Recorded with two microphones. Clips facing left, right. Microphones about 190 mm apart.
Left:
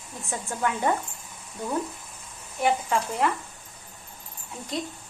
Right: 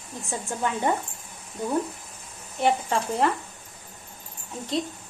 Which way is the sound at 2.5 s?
35° right (ahead or behind).